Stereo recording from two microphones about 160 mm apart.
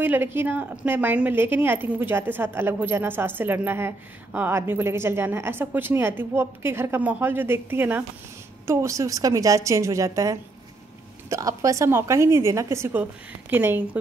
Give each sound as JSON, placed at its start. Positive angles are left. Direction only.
{"t": 0.0, "sound": "a woman's voice", "side_deg": -15}